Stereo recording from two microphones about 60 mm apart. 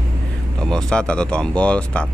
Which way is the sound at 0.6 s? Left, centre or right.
Centre.